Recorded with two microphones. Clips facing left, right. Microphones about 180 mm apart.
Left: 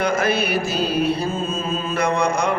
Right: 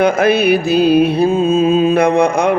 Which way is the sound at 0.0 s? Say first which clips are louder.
Right 8 dB; 60° right (ahead or behind).